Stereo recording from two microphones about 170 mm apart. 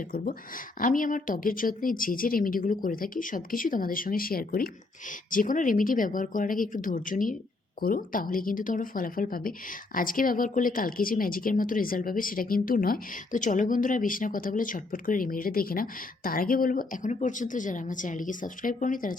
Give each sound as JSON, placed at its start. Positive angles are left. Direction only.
{"t": 0.8, "sound": "speech", "side_deg": 50}